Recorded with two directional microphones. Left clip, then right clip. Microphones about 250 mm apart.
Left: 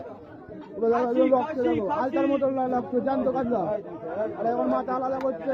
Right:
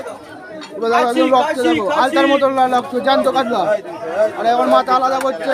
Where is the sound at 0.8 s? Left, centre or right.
Right.